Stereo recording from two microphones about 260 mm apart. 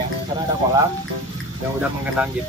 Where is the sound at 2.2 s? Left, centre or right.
Centre.